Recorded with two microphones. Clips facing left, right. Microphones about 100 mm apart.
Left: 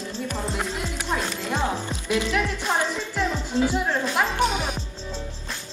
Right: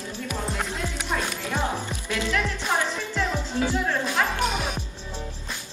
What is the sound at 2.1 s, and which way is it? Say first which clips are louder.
Music: left 3 dB; 20° left (ahead or behind).